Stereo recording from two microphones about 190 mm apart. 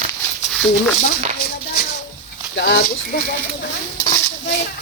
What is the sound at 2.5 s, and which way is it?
Speech, 70° left (ahead or behind).